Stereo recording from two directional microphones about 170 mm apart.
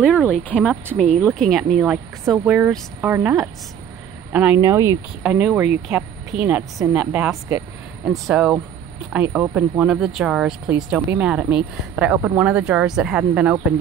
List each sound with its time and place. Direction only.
0.0 s speech: centre (ahead or behind); by 4.9 s 15° right (ahead or behind)
5.2 s speech: 5° right (ahead or behind)